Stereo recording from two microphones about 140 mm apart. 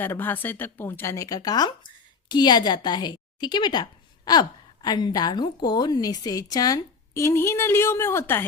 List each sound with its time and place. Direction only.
0.0 s a woman's voice: 15° left (ahead or behind)